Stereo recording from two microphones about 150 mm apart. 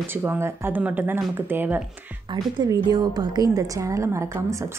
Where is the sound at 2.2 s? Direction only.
25° right (ahead or behind).